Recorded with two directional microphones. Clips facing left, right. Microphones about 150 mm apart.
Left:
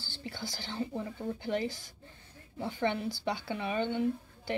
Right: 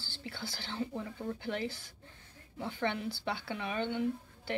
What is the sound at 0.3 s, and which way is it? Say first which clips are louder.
Speech: left 2 dB; 15° left (ahead or behind).